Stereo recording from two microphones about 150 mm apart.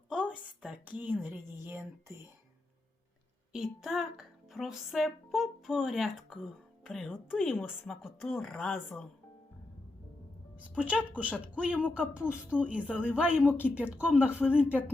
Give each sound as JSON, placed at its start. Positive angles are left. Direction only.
{"t": 0.1, "sound": "a sound", "side_deg": -5}
{"t": 1.2, "sound": "speech", "side_deg": -15}
{"t": 3.5, "sound": "speech", "side_deg": -5}
{"t": 10.6, "sound": "speech", "side_deg": -10}